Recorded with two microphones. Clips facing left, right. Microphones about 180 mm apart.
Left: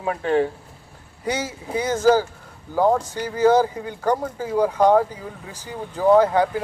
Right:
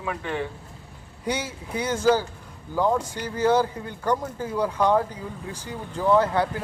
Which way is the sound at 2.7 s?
35° left (ahead or behind).